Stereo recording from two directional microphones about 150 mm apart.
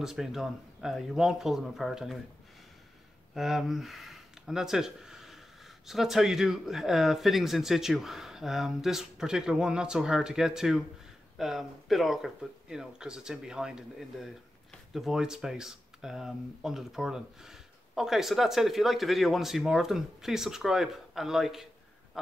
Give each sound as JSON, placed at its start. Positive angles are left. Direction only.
{"t": 0.0, "sound": "speech", "side_deg": -5}
{"t": 3.3, "sound": "speech", "side_deg": 0}
{"t": 22.2, "sound": "a sound", "side_deg": 0}